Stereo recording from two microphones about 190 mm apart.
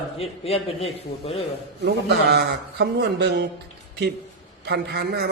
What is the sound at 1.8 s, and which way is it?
A man's voice, 60° right (ahead or behind).